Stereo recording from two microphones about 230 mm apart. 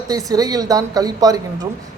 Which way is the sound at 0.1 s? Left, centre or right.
Centre.